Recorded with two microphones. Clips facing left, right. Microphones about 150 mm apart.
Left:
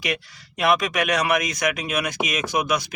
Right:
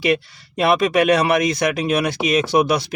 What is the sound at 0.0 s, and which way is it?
Speech, 30° right (ahead or behind).